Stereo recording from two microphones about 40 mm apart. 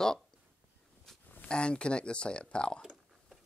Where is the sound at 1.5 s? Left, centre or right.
Left.